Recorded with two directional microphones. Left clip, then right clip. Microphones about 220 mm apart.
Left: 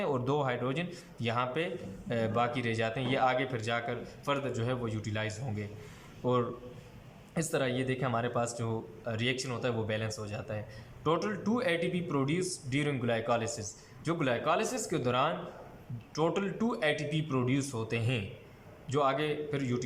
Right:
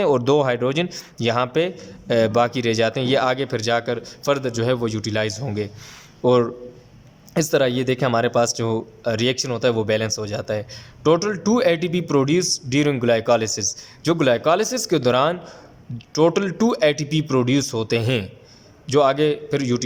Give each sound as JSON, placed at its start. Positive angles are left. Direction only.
{"t": 0.0, "sound": "a man's voice", "side_deg": -50}
{"t": 7.5, "sound": "a man's voice", "side_deg": -55}